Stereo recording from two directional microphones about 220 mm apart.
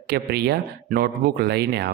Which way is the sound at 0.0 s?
45° right (ahead or behind).